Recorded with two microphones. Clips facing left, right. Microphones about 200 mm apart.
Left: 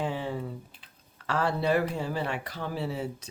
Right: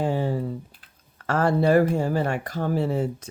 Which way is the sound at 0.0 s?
45° right (ahead or behind).